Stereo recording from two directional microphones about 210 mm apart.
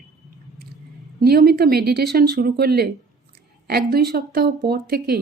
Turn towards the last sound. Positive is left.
turn(degrees=-45)  # may be behind; listen again after turning